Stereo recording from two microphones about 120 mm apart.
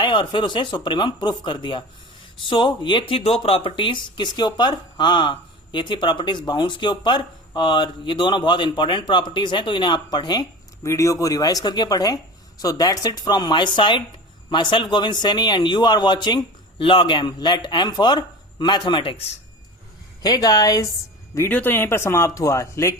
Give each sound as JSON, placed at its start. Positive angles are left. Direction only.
{"t": 0.0, "sound": "speech", "side_deg": 40}
{"t": 10.8, "sound": "a man's voice", "side_deg": 25}
{"t": 20.2, "sound": "speech", "side_deg": 35}
{"t": 21.3, "sound": "speech", "side_deg": 20}